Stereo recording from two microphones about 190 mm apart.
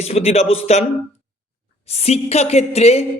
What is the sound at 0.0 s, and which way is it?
A man's voice, 35° left (ahead or behind).